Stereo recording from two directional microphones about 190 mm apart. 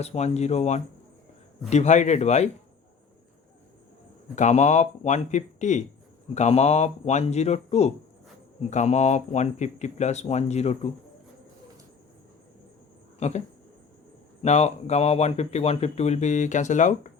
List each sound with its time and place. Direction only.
0.0 s speech: 35° left (ahead or behind)
4.4 s speech: 40° left (ahead or behind)
13.1 s speech: 35° left (ahead or behind)
14.4 s speech: 35° left (ahead or behind)